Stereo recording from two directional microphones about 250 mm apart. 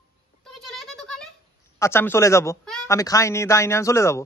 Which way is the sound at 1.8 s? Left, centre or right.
Centre.